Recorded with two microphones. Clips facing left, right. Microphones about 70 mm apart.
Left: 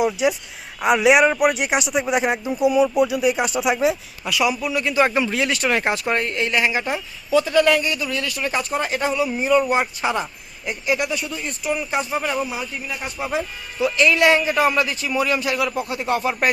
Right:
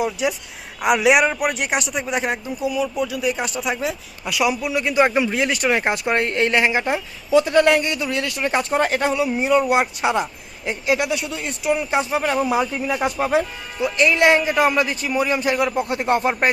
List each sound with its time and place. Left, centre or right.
0.0 s speech: centre
2.4 s speech: left
4.3 s speech: centre
6.1 s speech: right
9.2 s speech: right
11.1 s speech: right
11.7 s speech: right
12.2 s speech: right
12.5 s speech: right
13.1 s speech: right